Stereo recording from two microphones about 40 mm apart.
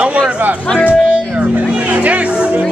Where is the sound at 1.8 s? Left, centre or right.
Right.